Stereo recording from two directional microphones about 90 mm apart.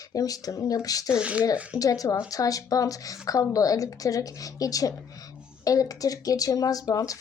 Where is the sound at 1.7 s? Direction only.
40° left (ahead or behind).